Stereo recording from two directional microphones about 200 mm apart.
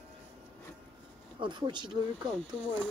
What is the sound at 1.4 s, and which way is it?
Speech, 25° right (ahead or behind).